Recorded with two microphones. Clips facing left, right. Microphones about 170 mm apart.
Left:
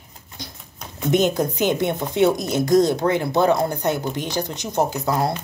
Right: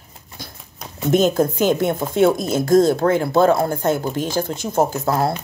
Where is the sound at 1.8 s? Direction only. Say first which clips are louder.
Right 2 dB; 20° left (ahead or behind).